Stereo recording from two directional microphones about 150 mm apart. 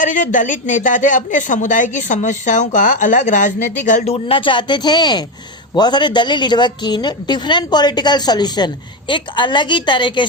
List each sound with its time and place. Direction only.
0.0 s a woman's voice: 60° left (ahead or behind); by 10.2 s 30° left (ahead or behind)